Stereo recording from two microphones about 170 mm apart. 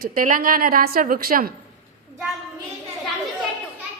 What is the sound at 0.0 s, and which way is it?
A woman's voice, 55° right (ahead or behind).